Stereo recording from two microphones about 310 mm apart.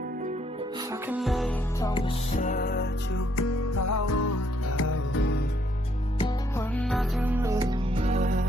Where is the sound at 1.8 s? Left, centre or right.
Centre; by 2.9 s left.